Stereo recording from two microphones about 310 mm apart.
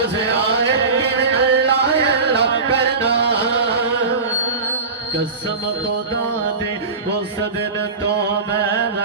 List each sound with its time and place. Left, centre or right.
0.3 s music: right